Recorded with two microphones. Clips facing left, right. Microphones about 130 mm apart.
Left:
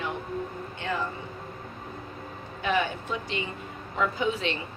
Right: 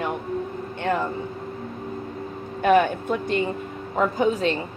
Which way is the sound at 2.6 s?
50° right (ahead or behind).